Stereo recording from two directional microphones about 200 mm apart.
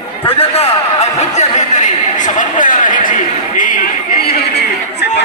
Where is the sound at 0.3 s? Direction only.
30° left (ahead or behind); by 4.6 s 50° left (ahead or behind).